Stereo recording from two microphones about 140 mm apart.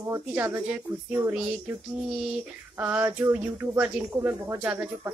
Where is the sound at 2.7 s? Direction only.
10° right (ahead or behind).